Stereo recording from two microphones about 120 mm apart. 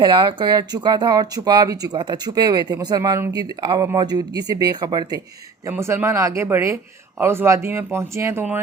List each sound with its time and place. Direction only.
0.0 s speech: 40° right (ahead or behind)
5.6 s speech: 25° right (ahead or behind)